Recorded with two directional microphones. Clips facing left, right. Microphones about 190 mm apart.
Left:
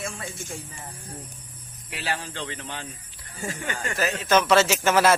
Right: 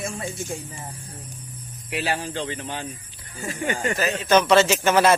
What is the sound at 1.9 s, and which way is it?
Speech, 15° right (ahead or behind).